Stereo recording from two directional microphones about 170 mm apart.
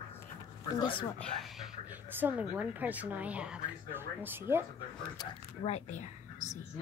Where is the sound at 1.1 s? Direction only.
5° left (ahead or behind).